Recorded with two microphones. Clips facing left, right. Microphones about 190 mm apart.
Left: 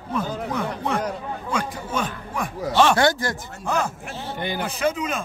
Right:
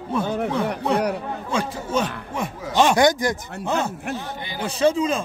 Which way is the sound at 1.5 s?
25° right (ahead or behind).